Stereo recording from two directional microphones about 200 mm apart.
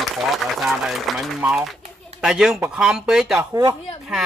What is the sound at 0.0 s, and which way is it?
Speech, centre (ahead or behind).